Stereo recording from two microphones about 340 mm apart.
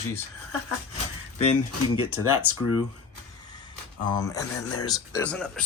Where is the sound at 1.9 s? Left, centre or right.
Left.